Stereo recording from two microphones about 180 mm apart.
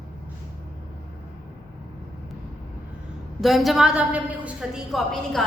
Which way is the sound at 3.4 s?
Centre (ahead or behind).